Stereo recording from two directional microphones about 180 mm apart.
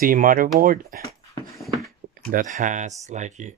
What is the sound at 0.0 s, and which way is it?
Speech, 50° right (ahead or behind).